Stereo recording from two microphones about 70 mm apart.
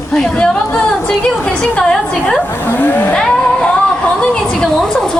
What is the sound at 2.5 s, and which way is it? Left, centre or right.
Speech, left.